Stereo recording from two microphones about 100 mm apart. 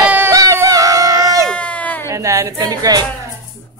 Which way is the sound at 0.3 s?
35° right (ahead or behind).